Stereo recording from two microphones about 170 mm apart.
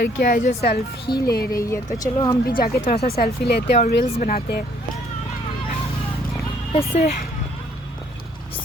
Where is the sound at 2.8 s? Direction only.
40° left (ahead or behind).